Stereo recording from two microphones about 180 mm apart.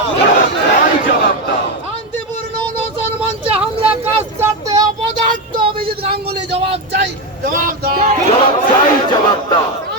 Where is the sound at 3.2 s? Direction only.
5° right (ahead or behind).